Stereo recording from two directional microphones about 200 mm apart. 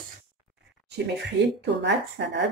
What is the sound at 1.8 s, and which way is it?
Speech, 60° right (ahead or behind).